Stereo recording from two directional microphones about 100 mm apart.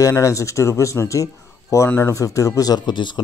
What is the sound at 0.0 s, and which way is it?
A man's voice, 30° left (ahead or behind).